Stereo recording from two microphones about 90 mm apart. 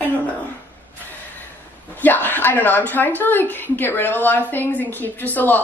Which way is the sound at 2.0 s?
20° left (ahead or behind).